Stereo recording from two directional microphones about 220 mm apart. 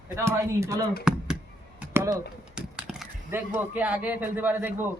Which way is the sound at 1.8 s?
10° right (ahead or behind).